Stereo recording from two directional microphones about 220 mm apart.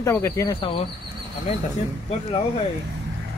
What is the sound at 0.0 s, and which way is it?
Speech, 15° left (ahead or behind).